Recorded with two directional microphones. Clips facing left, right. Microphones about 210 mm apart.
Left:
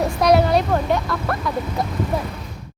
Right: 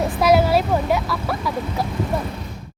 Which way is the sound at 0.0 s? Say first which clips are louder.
Even; centre (ahead or behind).